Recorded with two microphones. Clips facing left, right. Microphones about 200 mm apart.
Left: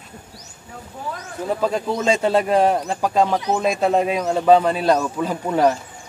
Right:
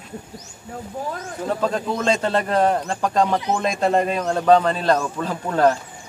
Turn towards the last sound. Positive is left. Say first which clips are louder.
# even
turn(degrees=10)  # may be behind; listen again after turning